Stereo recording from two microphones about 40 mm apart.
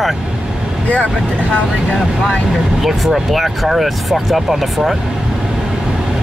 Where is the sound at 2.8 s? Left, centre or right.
Centre.